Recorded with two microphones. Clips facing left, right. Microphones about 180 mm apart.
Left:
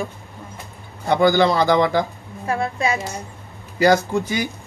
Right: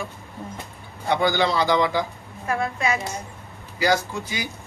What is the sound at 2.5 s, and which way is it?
Speech, 30° left (ahead or behind).